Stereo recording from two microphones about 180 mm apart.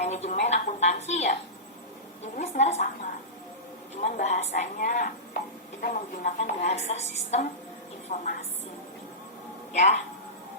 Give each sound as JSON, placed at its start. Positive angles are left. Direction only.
{"t": 0.0, "sound": "a sound", "side_deg": 40}
{"t": 0.4, "sound": "a woman's voice", "side_deg": 40}
{"t": 9.7, "sound": "a woman's voice", "side_deg": 40}